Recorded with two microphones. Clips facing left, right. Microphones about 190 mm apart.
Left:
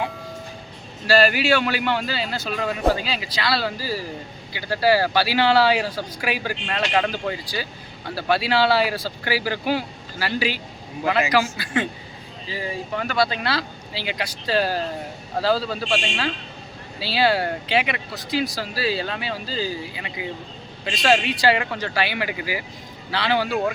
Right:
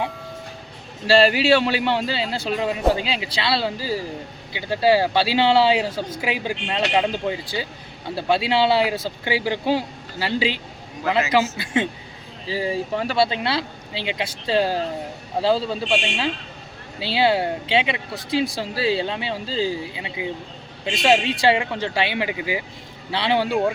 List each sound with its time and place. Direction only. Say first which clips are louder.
1.0 s a man's voice: right 2 dB; 25° right (ahead or behind)